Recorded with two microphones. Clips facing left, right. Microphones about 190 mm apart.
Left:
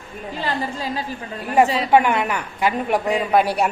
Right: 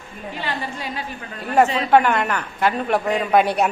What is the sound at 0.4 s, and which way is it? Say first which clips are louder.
Speech: left 4 dB; 35° left (ahead or behind).